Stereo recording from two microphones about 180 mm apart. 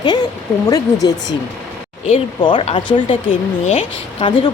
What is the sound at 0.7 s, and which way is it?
Speech, 20° left (ahead or behind).